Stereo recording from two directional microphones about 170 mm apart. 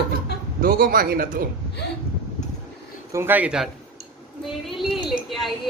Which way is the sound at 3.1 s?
15° right (ahead or behind).